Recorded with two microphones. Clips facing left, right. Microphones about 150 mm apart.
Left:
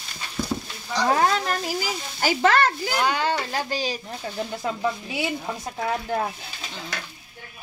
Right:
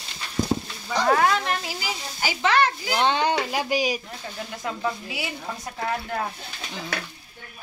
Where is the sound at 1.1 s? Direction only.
35° left (ahead or behind).